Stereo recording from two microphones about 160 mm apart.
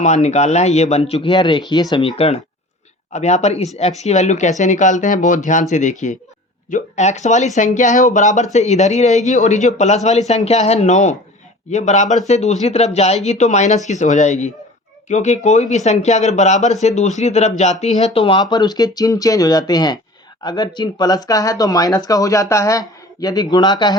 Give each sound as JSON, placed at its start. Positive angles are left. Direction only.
{"t": 0.0, "sound": "speech", "side_deg": 45}